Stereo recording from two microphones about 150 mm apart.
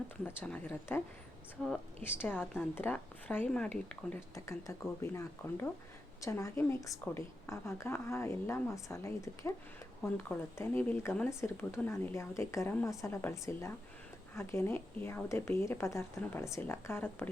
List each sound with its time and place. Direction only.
0.3 s speech: 10° left (ahead or behind)